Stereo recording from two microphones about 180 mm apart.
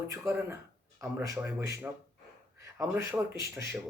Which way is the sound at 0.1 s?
15° right (ahead or behind).